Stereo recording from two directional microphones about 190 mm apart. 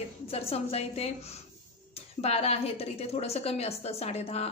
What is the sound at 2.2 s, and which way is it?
Speech, 30° left (ahead or behind).